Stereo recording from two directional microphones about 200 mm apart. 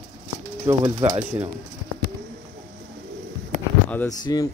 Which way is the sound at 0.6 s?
20° right (ahead or behind).